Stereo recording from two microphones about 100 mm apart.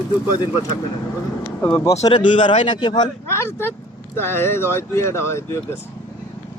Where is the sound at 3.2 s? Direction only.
25° left (ahead or behind).